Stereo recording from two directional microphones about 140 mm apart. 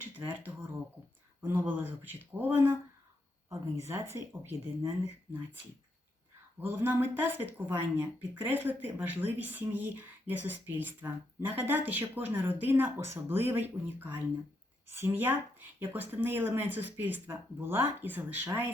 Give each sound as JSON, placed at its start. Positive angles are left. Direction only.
{"t": 0.0, "sound": "a sound", "side_deg": -15}
{"t": 4.3, "sound": "speech", "side_deg": -20}
{"t": 6.6, "sound": "speech", "side_deg": -15}